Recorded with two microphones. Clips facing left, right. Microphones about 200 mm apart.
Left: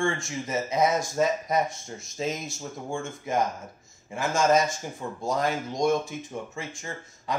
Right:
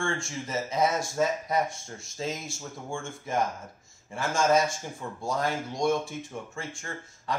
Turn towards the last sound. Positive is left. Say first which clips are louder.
# left 1 dB
turn(degrees=20)  # may be behind; listen again after turning